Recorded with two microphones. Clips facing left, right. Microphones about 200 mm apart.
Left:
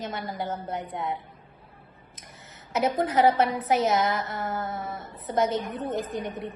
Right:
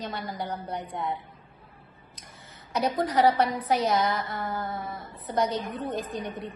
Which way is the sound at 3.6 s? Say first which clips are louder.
Left 1 dB; 20° left (ahead or behind).